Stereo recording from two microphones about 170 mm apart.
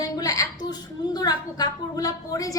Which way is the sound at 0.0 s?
20° left (ahead or behind).